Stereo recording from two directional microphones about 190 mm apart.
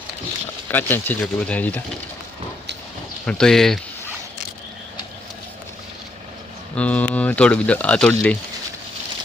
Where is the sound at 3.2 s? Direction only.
5° left (ahead or behind).